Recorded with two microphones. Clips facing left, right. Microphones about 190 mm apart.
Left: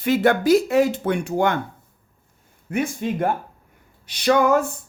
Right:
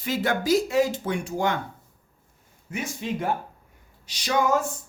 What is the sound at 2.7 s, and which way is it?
Speech, 50° left (ahead or behind).